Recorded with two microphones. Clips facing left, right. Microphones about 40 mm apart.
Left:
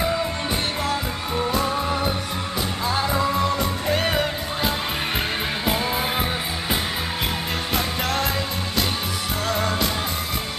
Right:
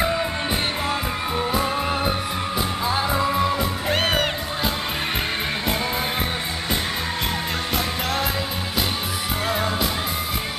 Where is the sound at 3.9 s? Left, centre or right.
Right.